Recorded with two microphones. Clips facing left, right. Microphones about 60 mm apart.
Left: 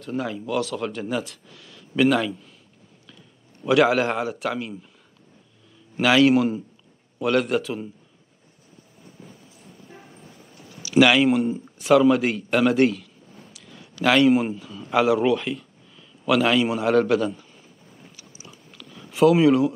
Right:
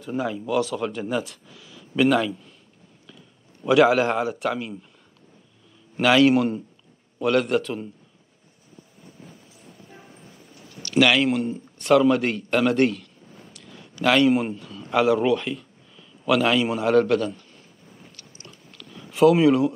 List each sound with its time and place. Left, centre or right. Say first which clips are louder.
0.0 s speech: right 1 dB; centre
3.6 s speech: right 1 dB; centre
5.9 s speech: even; centre
10.7 s a man's voice: left 2 dB; centre
18.1 s chewing: left 1 dB; centre